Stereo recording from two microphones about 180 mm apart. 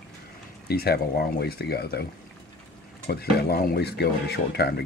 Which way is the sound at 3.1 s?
60° left (ahead or behind).